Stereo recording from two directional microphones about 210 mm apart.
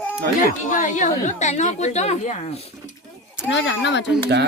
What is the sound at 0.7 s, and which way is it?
A woman's voice, 35° left (ahead or behind).